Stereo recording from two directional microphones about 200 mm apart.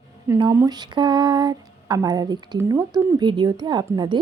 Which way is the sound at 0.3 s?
15° right (ahead or behind).